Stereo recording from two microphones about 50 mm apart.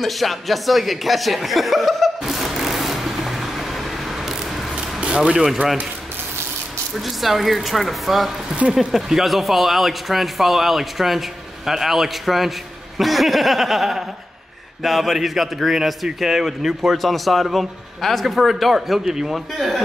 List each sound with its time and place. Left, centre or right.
0.0 s chuckle: centre
4.7 s a sound: centre
7.0 s speech: centre